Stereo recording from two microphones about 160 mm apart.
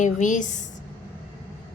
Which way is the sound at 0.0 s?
50° left (ahead or behind).